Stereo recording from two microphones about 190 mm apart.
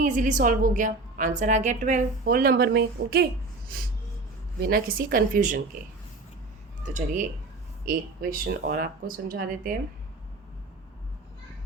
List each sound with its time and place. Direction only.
0.0 s speech: 40° right (ahead or behind)
4.6 s speech: 50° right (ahead or behind)
6.8 s speech: 40° right (ahead or behind)